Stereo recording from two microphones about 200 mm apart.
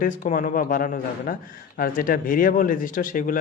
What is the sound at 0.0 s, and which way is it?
A man's voice, 45° left (ahead or behind).